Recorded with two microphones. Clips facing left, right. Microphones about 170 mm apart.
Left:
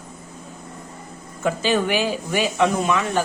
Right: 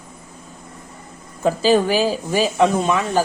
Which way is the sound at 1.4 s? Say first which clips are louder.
Right 5 dB; 35° right (ahead or behind).